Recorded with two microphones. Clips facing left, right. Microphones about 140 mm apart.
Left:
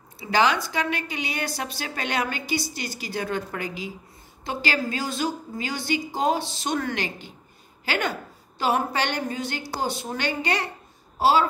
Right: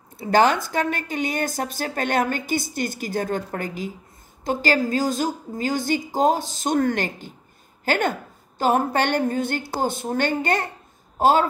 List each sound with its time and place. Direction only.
0.2 s a woman's voice: 50° right (ahead or behind)